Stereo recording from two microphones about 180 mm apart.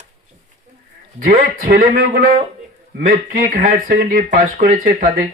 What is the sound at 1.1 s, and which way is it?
Speech, 50° right (ahead or behind).